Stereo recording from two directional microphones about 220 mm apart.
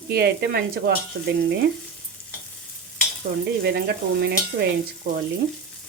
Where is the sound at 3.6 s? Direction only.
50° right (ahead or behind).